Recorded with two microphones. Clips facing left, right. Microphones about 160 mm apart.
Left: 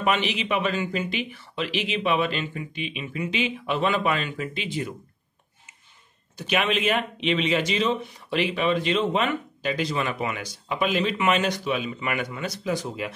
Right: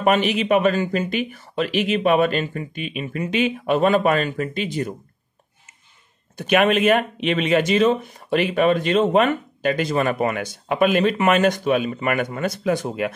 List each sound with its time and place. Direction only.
0.0 s speech: 45° right (ahead or behind)
6.3 s speech: 55° right (ahead or behind)